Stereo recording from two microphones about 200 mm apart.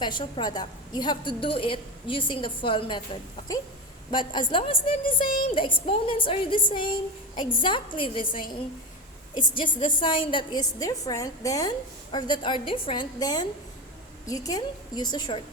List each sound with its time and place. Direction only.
0.0 s a woman's voice: 25° left (ahead or behind)
9.6 s a woman's voice: 25° left (ahead or behind)